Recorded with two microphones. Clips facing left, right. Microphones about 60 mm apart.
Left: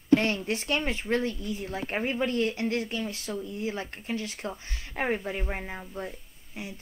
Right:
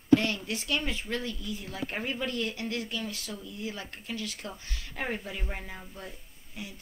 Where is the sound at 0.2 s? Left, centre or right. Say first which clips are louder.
Left 4 dB; left.